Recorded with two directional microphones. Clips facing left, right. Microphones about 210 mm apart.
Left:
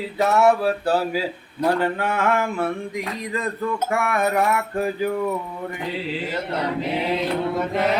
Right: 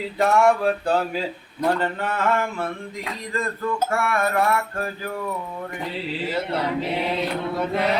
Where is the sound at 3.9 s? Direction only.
15° left (ahead or behind).